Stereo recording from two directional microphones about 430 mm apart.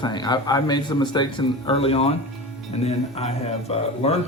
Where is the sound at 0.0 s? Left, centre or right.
Centre.